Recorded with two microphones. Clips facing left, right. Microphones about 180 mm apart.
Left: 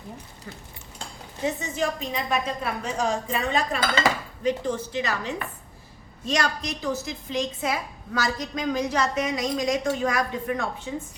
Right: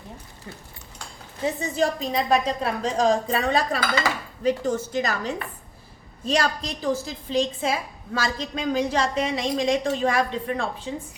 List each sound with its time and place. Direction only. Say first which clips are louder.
1.7 s a woman's voice: right 4 dB; 35° right (ahead or behind)